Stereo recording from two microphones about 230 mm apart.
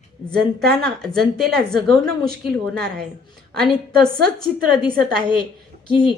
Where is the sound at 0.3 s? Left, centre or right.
Centre.